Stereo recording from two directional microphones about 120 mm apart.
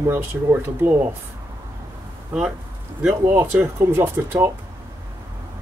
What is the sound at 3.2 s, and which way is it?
Speech, 20° right (ahead or behind).